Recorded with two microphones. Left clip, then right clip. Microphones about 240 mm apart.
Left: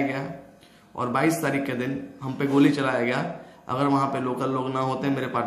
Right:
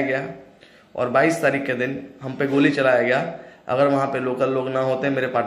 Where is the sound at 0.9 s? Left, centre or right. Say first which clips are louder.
Right 5 dB; centre.